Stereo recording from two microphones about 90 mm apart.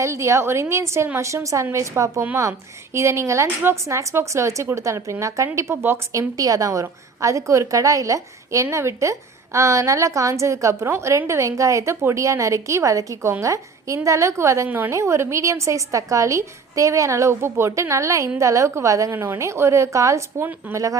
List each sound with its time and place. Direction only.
0.0 s a woman's voice: 35° right (ahead or behind)
6.3 s a woman's voice: 40° right (ahead or behind)